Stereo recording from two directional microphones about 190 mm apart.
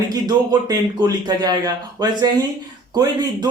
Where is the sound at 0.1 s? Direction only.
20° right (ahead or behind).